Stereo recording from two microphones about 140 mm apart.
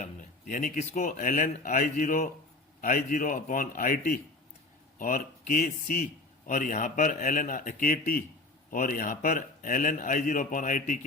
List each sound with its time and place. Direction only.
0.0 s a man's voice: 70° left (ahead or behind); by 4.2 s 90° left
4.9 s a man's voice: 75° left (ahead or behind)